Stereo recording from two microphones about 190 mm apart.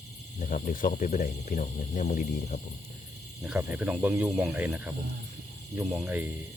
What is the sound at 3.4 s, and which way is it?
Speech, 5° right (ahead or behind).